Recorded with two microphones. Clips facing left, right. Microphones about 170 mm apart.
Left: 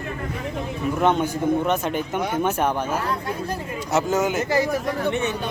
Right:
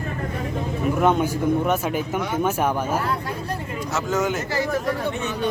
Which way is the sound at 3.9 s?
10° left (ahead or behind).